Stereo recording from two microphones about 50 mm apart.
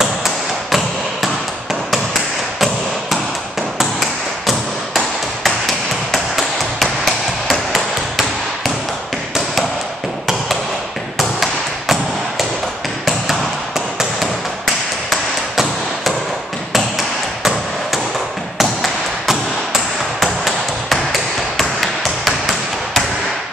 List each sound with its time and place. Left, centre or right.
0.0 s tap: centre
3.7 s tap: centre
13.0 s tap: centre
17.4 s hammer: centre
18.6 s thump: centre
22.2 s hammer: centre